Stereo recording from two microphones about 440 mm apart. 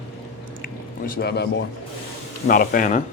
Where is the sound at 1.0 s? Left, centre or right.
Left.